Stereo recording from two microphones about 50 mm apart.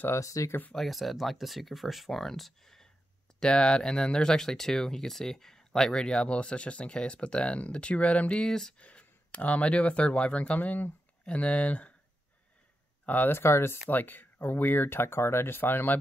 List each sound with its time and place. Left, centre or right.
0.1 s speech: left
0.7 s speech: centre
3.3 s speech: centre
8.7 s speech: left
13.0 s speech: left
13.3 s speech: left
13.8 s speech: left